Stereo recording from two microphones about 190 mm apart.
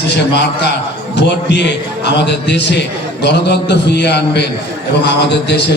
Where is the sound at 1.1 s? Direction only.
65° left (ahead or behind).